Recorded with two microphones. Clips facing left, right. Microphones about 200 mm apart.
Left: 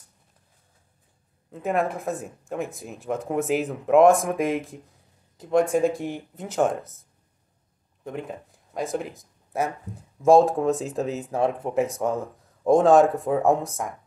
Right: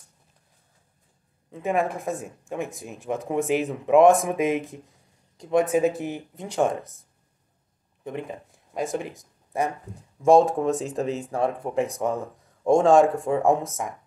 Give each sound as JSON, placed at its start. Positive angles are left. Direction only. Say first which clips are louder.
{"t": 1.5, "sound": "speech", "louder": "even", "side_deg": 0}